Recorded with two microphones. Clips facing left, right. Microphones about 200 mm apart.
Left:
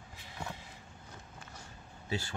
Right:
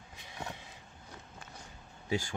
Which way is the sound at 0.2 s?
15° right (ahead or behind).